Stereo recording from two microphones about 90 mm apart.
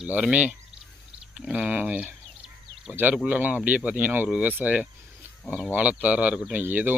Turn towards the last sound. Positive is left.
turn(degrees=-20)  # may be behind; listen again after turning